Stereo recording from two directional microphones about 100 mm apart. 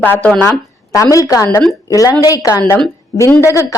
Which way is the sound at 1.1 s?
35° left (ahead or behind).